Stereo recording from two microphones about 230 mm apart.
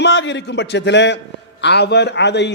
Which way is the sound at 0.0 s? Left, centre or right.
Left.